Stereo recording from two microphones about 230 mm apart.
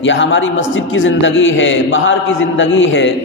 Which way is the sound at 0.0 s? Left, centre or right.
Left.